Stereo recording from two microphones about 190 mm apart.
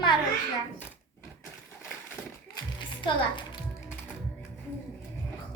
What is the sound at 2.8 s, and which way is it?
Music, 25° left (ahead or behind).